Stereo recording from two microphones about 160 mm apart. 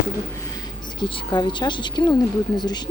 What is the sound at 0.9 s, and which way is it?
Speech, 25° left (ahead or behind).